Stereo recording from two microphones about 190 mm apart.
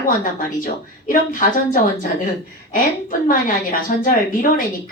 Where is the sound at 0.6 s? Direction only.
45° left (ahead or behind).